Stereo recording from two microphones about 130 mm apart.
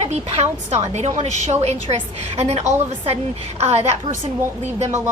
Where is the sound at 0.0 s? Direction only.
55° right (ahead or behind).